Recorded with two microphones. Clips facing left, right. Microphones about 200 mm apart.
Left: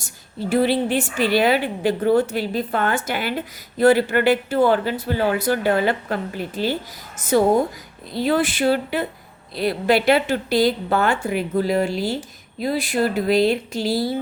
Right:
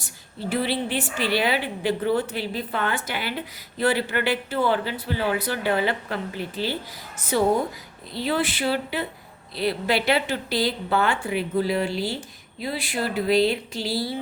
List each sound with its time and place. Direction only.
0.5 s speech: 45° left (ahead or behind)